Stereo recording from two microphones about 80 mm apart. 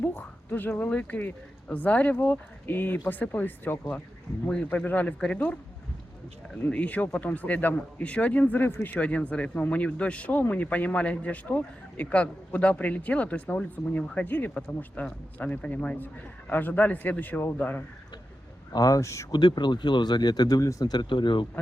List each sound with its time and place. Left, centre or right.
0.2 s a woman's voice: left
6.7 s speech: centre
18.7 s speech: left
19.3 s speech: left